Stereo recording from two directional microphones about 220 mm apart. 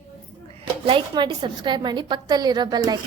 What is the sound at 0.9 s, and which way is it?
A woman's voice, 20° right (ahead or behind).